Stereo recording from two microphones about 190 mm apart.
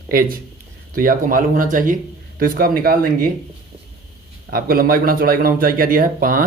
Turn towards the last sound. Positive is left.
turn(degrees=-45)  # may be behind; listen again after turning